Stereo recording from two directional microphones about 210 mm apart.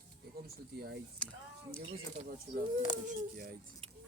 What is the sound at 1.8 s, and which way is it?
Speech, 45° right (ahead or behind).